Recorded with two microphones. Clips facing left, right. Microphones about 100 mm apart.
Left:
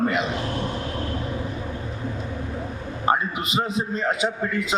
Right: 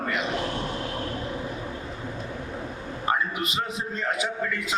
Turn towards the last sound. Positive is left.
turn(degrees=20)  # may be behind; listen again after turning